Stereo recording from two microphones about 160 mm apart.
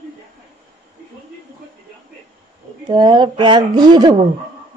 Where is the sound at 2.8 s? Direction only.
30° right (ahead or behind).